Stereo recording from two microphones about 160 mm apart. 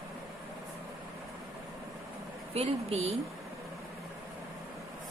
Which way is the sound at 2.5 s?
40° right (ahead or behind).